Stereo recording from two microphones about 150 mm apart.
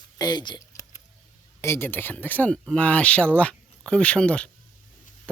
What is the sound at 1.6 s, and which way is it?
Speech, 15° left (ahead or behind).